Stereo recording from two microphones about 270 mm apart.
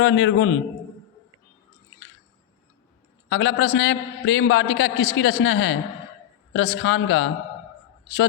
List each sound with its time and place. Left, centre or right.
0.0 s a man's voice: left
3.2 s a man's voice: left